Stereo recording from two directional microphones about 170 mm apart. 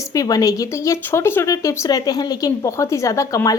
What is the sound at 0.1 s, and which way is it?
Speech, 20° left (ahead or behind).